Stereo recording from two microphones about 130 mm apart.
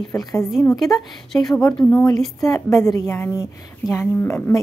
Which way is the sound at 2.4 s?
25° left (ahead or behind).